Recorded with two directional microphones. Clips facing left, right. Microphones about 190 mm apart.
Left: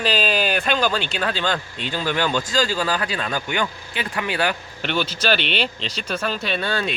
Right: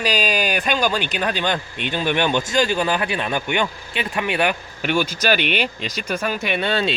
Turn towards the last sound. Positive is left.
turn(degrees=-25)  # may be behind; listen again after turning